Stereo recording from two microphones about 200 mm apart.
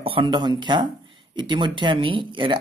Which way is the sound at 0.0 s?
25° right (ahead or behind).